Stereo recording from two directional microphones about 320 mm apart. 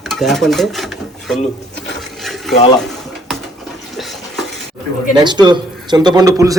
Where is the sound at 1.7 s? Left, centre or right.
Left.